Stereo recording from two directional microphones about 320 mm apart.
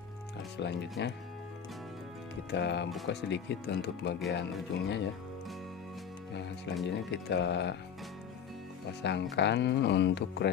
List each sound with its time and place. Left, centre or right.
0.6 s speech: left
2.5 s speech: left
6.9 s speech: left
9.0 s speech: left